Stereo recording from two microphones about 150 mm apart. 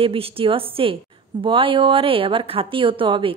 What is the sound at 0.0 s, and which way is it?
A woman's voice, 40° right (ahead or behind).